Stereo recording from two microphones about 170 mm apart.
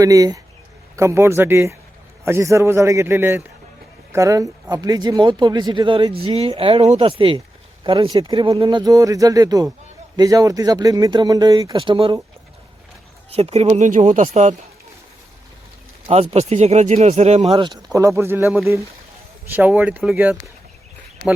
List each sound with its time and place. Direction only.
0.0 s a man's voice: 20° right (ahead or behind)
13.3 s speech: 40° right (ahead or behind)
16.0 s speech: 40° right (ahead or behind)
17.9 s a man's voice: 15° right (ahead or behind)